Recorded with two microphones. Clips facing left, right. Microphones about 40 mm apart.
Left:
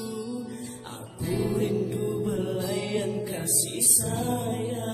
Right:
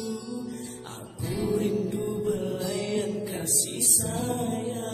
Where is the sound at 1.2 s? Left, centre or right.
Centre.